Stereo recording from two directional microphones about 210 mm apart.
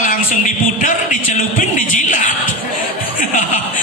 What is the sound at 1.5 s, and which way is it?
Music, 40° left (ahead or behind).